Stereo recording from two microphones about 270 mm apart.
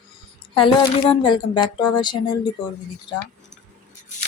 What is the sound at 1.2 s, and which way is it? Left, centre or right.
Speech, centre.